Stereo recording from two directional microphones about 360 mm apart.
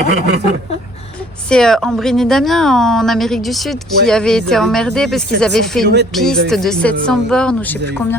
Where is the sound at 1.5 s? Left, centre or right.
Centre.